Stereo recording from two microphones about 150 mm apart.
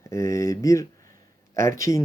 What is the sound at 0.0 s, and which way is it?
Speech, 20° left (ahead or behind).